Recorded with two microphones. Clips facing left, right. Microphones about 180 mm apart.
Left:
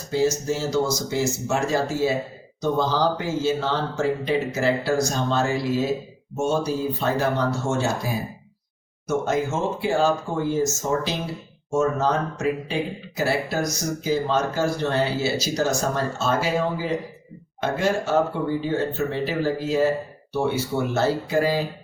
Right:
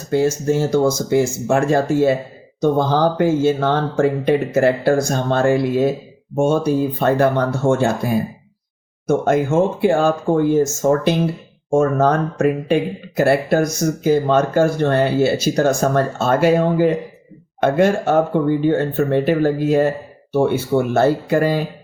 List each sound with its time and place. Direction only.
0.1 s speech: 55° right (ahead or behind)